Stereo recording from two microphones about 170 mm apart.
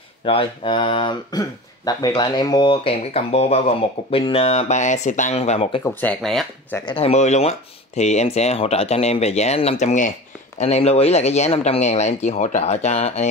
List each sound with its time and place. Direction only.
0.2 s speech: 30° left (ahead or behind)
5.9 s speech: 10° left (ahead or behind)
6.9 s speech: 35° left (ahead or behind)